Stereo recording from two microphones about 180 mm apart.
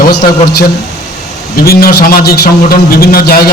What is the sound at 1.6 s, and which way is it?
A man's voice, 55° left (ahead or behind).